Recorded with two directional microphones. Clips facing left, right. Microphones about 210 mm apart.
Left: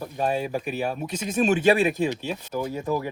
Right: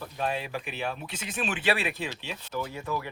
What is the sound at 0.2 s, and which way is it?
Speech, 45° left (ahead or behind).